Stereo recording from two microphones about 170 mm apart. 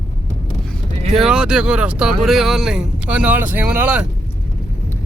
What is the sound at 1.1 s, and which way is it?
Speech, 5° right (ahead or behind).